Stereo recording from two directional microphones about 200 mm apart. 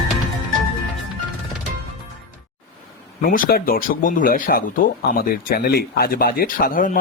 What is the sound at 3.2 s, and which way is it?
Speech, 45° left (ahead or behind).